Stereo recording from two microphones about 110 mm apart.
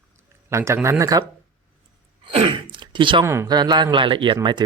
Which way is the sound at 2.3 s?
60° right (ahead or behind).